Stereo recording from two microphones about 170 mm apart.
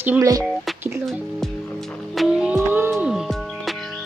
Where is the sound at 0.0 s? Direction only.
15° right (ahead or behind).